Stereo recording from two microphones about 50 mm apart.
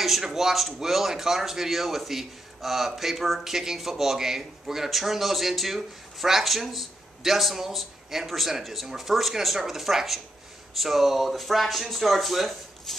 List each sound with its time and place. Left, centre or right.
0.0 s a man's voice: centre